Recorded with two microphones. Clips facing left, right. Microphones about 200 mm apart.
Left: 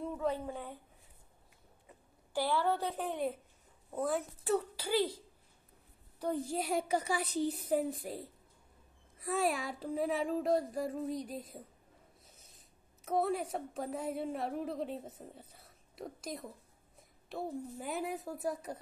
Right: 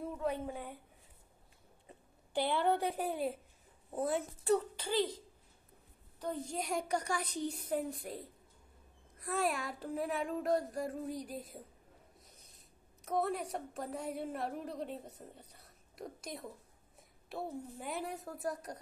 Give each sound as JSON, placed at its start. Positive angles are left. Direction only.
{"t": 0.3, "sound": "speech", "side_deg": -15}
{"t": 2.3, "sound": "a woman's voice", "side_deg": -20}
{"t": 4.0, "sound": "a woman's voice", "side_deg": 0}